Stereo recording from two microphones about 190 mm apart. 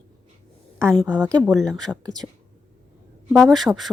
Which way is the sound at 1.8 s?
5° left (ahead or behind).